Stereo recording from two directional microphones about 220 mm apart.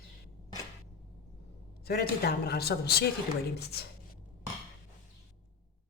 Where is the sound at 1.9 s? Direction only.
45° left (ahead or behind).